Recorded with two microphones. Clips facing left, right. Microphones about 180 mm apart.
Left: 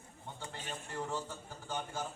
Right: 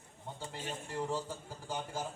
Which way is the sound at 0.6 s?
10° right (ahead or behind).